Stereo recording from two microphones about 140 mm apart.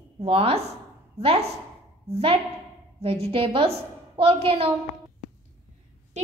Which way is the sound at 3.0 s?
40° right (ahead or behind).